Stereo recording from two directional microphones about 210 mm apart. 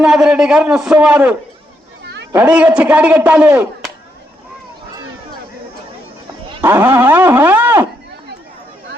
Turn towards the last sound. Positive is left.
turn(degrees=-10)  # may be behind; listen again after turning